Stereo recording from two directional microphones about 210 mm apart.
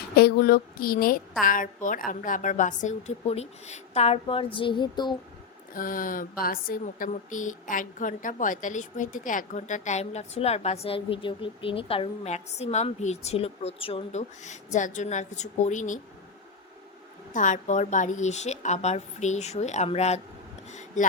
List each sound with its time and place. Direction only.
0.2 s speech: 45° left (ahead or behind); by 5.1 s 20° left (ahead or behind)
5.7 s speech: 40° left (ahead or behind)
17.3 s speech: 35° left (ahead or behind)